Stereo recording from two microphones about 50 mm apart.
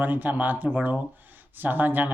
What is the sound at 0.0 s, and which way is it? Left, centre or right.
Speech, right.